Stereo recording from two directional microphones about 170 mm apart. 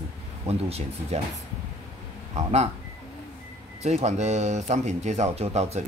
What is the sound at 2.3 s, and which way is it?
Speech, 40° right (ahead or behind).